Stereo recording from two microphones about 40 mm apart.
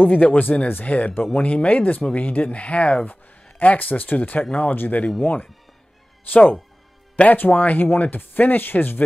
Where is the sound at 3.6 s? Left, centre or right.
Left.